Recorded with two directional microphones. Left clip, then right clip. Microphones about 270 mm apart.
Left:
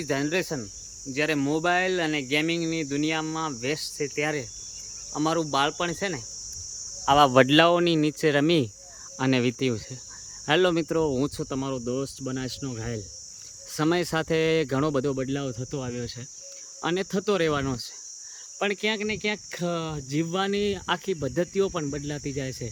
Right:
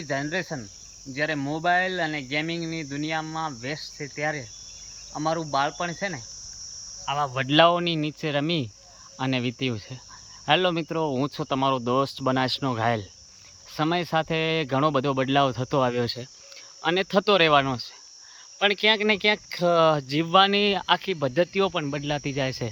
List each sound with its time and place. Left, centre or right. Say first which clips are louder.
0.0 s speech: left 2 dB; centre
7.1 s speech: left 8 dB; left
7.4 s speech: even; centre
13.7 s speech: right 1 dB; centre